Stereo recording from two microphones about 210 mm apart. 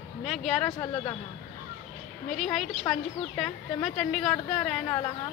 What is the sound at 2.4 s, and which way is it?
Speech, centre (ahead or behind).